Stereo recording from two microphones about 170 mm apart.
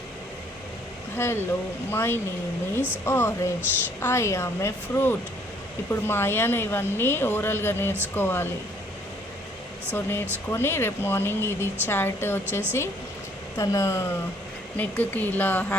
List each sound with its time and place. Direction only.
1.1 s speech: 15° left (ahead or behind)
9.9 s speech: 15° left (ahead or behind)